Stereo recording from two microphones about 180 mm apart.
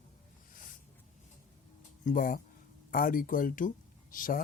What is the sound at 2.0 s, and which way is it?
Speech, 50° left (ahead or behind).